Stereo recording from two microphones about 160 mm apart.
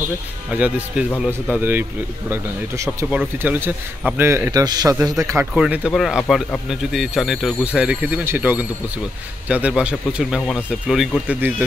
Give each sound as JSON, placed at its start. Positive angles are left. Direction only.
{"t": 0.5, "sound": "a man's voice", "side_deg": -10}
{"t": 5.5, "sound": "a man's voice", "side_deg": -5}